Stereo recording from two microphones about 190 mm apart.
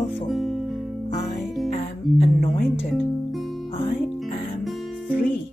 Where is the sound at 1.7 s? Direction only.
50° left (ahead or behind).